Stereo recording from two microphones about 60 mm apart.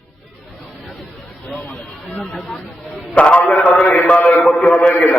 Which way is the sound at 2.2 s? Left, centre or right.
Centre.